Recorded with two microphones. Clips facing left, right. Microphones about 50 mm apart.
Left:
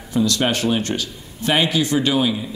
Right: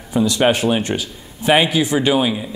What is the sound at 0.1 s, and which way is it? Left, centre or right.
Speech, centre.